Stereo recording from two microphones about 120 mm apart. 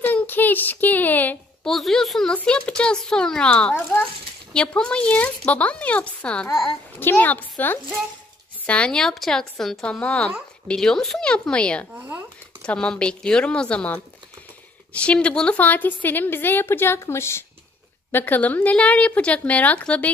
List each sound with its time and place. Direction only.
0.0 s a child's voice: 15° left (ahead or behind)
1.7 s a woman's voice: 5° left (ahead or behind)